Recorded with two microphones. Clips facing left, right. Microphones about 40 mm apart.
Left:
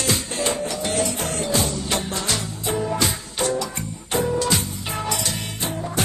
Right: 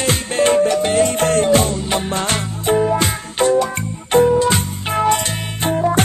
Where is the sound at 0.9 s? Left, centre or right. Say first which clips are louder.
Right 8 dB; right.